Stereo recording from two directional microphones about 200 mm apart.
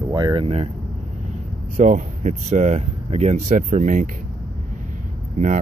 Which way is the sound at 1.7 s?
40° right (ahead or behind).